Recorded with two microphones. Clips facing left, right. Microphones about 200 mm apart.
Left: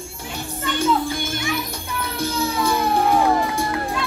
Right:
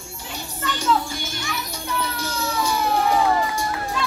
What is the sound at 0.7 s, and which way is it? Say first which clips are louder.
Music: left 3 dB; 55° left (ahead or behind).